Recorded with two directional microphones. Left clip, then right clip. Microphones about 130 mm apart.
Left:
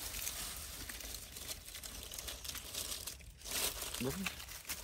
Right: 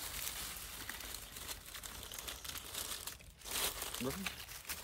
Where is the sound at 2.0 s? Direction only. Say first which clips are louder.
Left 1 dB; 5° right (ahead or behind).